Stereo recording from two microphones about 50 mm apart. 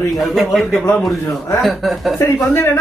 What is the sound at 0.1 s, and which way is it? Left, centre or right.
Speech, centre.